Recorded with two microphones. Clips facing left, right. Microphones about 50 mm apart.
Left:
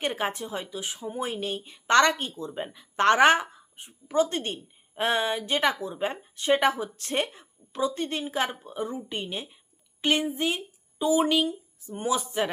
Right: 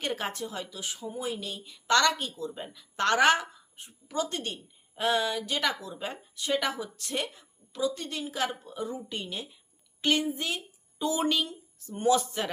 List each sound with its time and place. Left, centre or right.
0.0 s speech: left
1.1 s a woman's voice: left
11.0 s speech: centre